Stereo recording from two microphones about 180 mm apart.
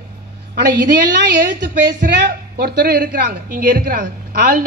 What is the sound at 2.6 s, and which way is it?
A woman's voice, 55° right (ahead or behind).